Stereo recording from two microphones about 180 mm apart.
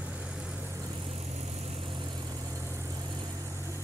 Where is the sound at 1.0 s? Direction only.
35° right (ahead or behind).